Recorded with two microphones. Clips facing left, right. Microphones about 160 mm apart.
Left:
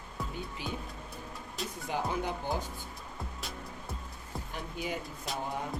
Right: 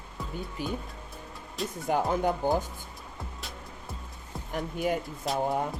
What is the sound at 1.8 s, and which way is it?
Speech, 50° right (ahead or behind).